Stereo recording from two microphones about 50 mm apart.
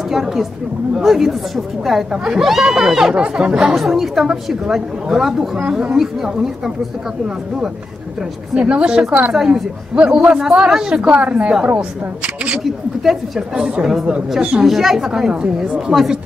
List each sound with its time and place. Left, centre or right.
0.1 s a woman's voice: centre
3.2 s a woman's voice: centre
3.7 s a woman's voice: centre
5.7 s a woman's voice: centre
5.9 s a woman's voice: centre
8.5 s a woman's voice: right
9.3 s a woman's voice: centre
9.9 s a woman's voice: right
12.6 s a woman's voice: centre
15.9 s a woman's voice: right